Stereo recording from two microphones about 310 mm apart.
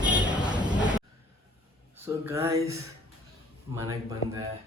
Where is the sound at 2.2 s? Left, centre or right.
Centre.